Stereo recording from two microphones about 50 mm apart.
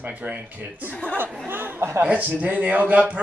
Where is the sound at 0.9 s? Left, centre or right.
Left.